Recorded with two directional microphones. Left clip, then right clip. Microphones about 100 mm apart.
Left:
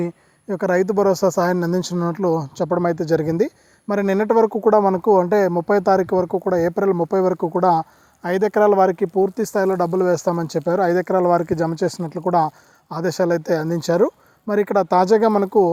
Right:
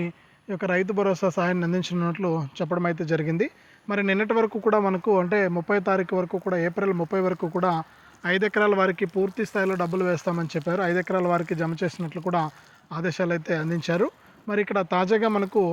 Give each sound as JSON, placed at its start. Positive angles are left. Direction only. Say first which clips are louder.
{"t": 0.0, "sound": "speech", "louder": "left 7 dB", "side_deg": 15}
{"t": 8.3, "sound": "speech", "louder": "left 6 dB", "side_deg": 25}
{"t": 9.4, "sound": "speech", "louder": "left 6 dB", "side_deg": 0}